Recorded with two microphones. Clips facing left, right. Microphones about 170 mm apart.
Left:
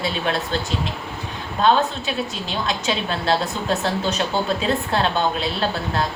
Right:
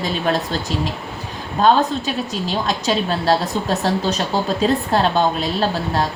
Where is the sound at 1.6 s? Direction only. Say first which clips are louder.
Right 3 dB; 40° right (ahead or behind).